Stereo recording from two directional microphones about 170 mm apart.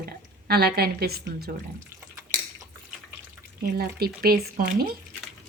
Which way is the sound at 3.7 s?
60° right (ahead or behind).